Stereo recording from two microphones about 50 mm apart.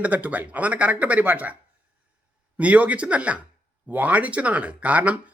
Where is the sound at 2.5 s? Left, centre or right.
Right.